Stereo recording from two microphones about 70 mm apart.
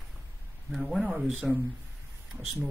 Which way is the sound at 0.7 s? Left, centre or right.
Centre.